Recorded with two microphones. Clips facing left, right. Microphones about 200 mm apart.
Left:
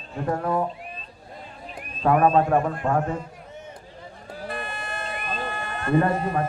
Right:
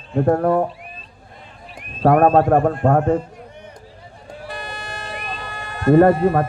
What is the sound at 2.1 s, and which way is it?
Speech, 45° right (ahead or behind).